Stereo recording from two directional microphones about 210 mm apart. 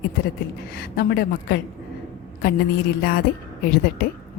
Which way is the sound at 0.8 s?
45° left (ahead or behind).